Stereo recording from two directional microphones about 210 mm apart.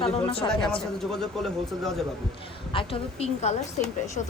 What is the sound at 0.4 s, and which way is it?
Speech, 5° left (ahead or behind).